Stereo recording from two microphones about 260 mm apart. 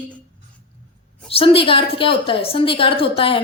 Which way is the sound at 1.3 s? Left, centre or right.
Left.